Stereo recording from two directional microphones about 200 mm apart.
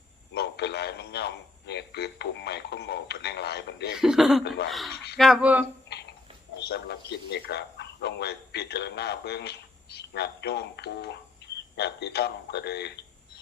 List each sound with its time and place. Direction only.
0.3 s a man's voice: 55° left (ahead or behind)
3.9 s cough: centre (ahead or behind)
4.4 s a man's voice: 55° left (ahead or behind)
5.1 s cough: centre (ahead or behind)
5.9 s a sound: 55° left (ahead or behind)
6.7 s a man's voice: 55° left (ahead or behind)